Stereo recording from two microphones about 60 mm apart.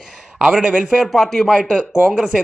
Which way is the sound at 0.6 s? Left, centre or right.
Centre.